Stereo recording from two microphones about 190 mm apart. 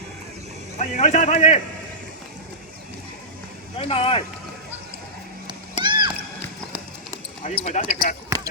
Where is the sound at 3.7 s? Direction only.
30° left (ahead or behind).